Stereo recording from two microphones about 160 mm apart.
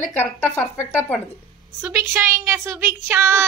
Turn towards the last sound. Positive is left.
turn(degrees=-15)  # may be behind; listen again after turning